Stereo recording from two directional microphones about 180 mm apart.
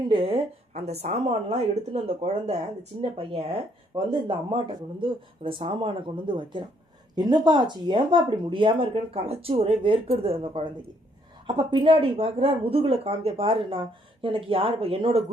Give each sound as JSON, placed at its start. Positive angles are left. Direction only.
{"t": 0.1, "sound": "speech", "side_deg": -30}